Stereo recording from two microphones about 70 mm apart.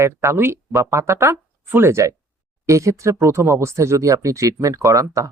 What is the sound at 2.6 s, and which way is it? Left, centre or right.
Speech, right.